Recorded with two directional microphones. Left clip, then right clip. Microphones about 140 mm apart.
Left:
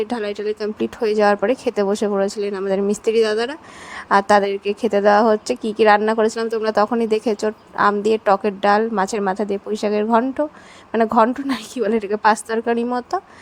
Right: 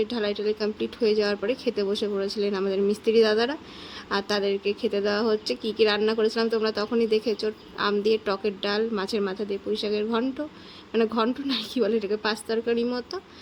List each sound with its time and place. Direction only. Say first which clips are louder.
0.0 s a woman's voice: left 3 dB; 50° left (ahead or behind)